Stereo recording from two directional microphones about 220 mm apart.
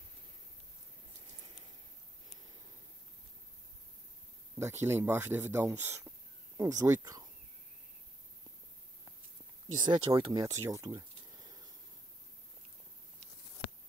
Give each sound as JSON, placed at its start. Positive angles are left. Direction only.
{"t": 4.6, "sound": "speech", "side_deg": -10}
{"t": 9.8, "sound": "speech", "side_deg": -20}